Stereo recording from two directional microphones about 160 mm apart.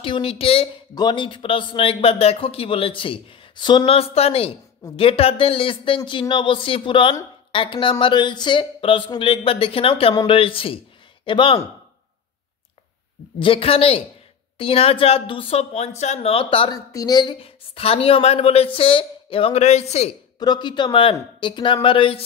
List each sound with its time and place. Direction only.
0.0 s speech: 35° left (ahead or behind)
13.4 s speech: 35° left (ahead or behind)
20.3 s speech: 25° left (ahead or behind)